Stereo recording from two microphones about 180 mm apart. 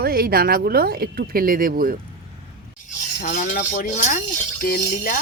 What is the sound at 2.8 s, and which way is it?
Speech, 45° left (ahead or behind).